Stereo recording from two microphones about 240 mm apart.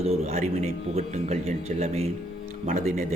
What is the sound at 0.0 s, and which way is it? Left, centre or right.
A man's voice, right.